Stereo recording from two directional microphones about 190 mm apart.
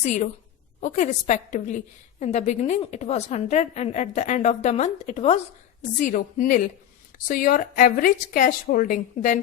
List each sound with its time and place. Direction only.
0.0 s a woman's voice: 40° left (ahead or behind)